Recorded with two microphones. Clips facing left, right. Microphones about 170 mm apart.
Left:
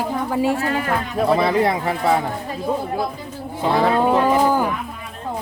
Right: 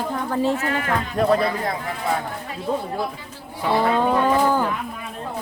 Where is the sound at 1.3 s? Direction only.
85° left.